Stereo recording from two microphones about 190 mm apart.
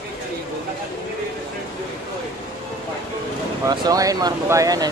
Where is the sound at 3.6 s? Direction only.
20° right (ahead or behind).